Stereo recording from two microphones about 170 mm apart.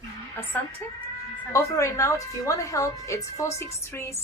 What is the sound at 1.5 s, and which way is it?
A woman's voice, 20° left (ahead or behind).